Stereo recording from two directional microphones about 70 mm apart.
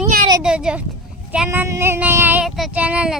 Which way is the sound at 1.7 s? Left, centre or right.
Right.